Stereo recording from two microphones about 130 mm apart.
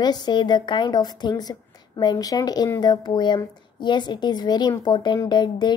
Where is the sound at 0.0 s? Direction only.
30° left (ahead or behind).